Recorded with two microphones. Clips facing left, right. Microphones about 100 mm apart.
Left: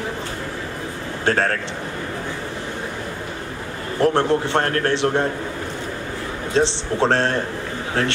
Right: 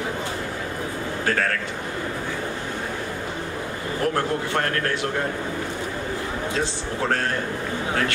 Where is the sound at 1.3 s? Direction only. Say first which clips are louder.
Left 5 dB; 30° left (ahead or behind).